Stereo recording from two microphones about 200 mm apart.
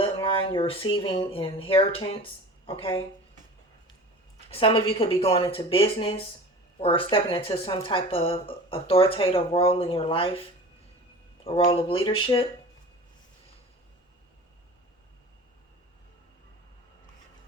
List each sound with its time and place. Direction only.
0.0 s speech: 25° left (ahead or behind)
4.5 s speech: 25° left (ahead or behind)
11.4 s speech: 25° left (ahead or behind)